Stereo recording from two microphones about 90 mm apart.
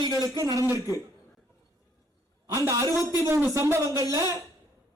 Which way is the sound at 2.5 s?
35° right (ahead or behind).